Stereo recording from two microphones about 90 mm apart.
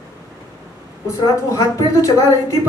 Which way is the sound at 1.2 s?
35° left (ahead or behind).